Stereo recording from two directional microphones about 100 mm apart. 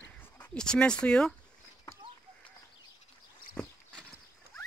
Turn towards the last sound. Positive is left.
turn(degrees=10)  # may be behind; listen again after turning